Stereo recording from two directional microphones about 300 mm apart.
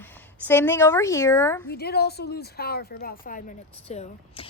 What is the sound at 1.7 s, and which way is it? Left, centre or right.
A woman's voice, left.